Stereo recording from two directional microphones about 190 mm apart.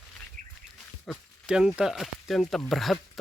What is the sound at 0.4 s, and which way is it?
Bird, 45° right (ahead or behind).